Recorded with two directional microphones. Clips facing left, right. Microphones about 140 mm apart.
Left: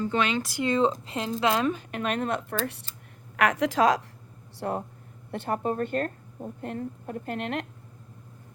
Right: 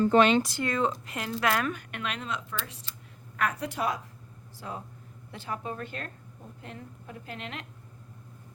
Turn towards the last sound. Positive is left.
turn(degrees=55)  # may be behind; listen again after turning